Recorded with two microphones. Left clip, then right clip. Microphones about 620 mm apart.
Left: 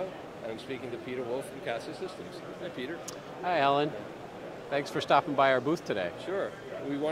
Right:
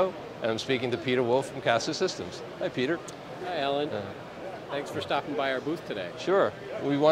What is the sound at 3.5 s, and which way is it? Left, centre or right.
Speech, left.